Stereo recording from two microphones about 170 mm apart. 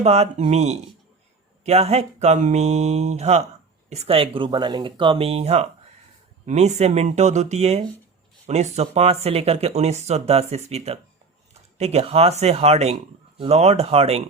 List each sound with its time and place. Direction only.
0.0 s speech: 40° right (ahead or behind)